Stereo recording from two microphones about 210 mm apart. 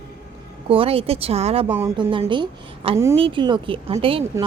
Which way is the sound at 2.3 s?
25° right (ahead or behind).